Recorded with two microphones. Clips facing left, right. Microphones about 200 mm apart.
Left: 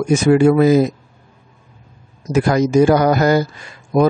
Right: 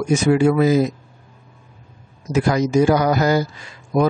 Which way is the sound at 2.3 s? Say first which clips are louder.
Left 3 dB; 55° left (ahead or behind).